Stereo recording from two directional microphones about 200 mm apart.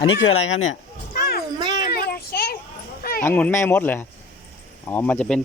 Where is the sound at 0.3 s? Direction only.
80° left.